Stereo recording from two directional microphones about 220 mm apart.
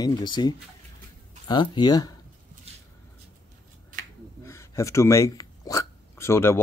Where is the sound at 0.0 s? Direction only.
20° left (ahead or behind).